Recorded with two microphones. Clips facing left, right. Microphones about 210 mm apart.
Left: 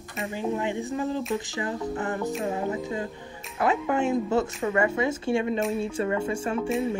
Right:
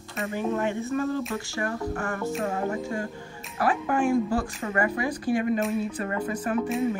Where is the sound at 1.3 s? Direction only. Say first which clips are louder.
Left 1 dB; 20° left (ahead or behind).